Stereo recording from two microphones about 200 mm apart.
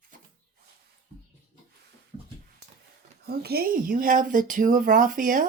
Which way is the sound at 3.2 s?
50° right (ahead or behind).